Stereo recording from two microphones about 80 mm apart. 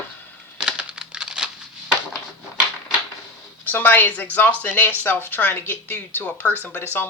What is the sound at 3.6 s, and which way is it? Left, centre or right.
Speech, left.